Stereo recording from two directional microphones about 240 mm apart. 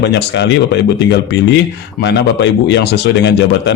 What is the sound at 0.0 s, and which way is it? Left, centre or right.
A man's voice, left.